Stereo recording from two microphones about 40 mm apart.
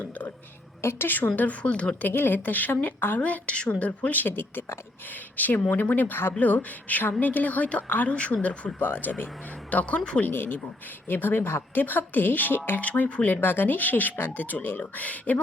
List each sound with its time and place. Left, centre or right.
0.8 s a woman's voice: left
1.0 s speech: left
1.4 s speech: left
2.0 s speech: left
3.2 s speech: left
5.4 s speech: left
6.4 s speech: left
8.8 s speech: left
9.6 s speech: left
10.2 s speech: left
12.8 s speech: left
13.2 s speech: left
14.8 s speech: left